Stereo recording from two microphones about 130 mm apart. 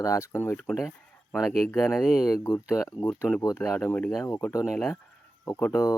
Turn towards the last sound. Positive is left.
turn(degrees=20)  # may be behind; listen again after turning